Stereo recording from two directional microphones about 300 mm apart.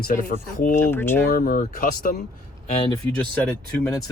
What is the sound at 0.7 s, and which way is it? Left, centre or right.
Speech, centre.